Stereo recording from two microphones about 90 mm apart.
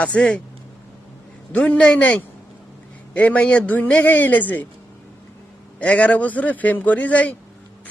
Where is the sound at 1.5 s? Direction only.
10° left (ahead or behind).